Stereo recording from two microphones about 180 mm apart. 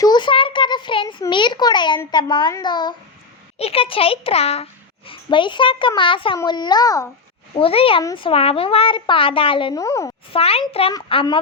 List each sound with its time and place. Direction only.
0.0 s a sound: 25° left (ahead or behind)
1.2 s a child's voice: 25° left (ahead or behind)
7.5 s a child's voice: 30° left (ahead or behind)
9.8 s a child's voice: 15° left (ahead or behind)
10.3 s a child's voice: 35° left (ahead or behind)